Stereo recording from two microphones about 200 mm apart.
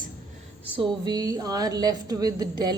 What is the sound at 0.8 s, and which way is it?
A woman's voice, 20° right (ahead or behind).